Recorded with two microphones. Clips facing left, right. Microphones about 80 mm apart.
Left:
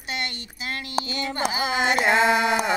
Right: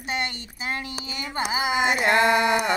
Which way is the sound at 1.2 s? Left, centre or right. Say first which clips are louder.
Right 3 dB; centre.